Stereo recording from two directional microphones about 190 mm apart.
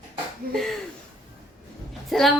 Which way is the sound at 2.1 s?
Centre (ahead or behind).